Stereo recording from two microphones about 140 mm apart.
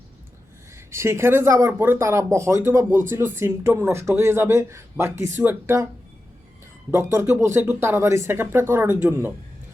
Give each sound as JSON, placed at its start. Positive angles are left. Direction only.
{"t": 0.9, "sound": "speech", "side_deg": -20}
{"t": 6.9, "sound": "speech", "side_deg": -20}